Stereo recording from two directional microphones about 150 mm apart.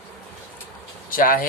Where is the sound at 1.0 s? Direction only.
70° left (ahead or behind).